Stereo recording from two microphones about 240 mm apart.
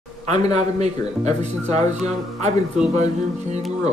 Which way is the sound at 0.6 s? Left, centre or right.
Right.